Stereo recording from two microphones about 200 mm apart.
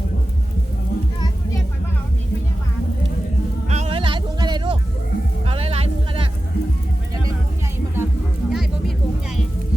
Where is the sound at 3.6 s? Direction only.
35° right (ahead or behind).